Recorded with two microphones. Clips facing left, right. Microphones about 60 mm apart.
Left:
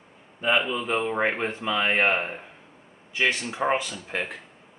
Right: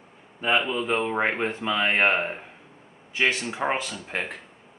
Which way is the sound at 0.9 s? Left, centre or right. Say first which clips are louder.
Even; centre.